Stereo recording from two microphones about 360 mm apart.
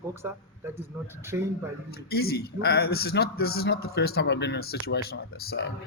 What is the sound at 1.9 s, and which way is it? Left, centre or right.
A man's voice, left.